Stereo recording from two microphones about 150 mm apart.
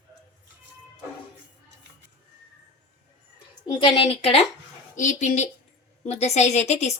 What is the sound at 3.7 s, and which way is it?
Speech, 35° left (ahead or behind).